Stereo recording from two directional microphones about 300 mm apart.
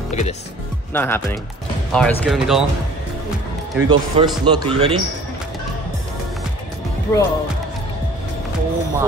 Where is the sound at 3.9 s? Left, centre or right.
Centre.